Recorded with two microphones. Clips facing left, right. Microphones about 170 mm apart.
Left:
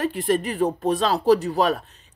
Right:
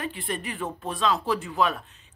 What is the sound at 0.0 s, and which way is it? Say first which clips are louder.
Speech: left 10 dB; 40° left (ahead or behind).